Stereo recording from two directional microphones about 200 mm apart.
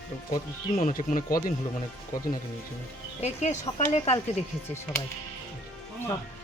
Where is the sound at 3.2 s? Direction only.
35° left (ahead or behind).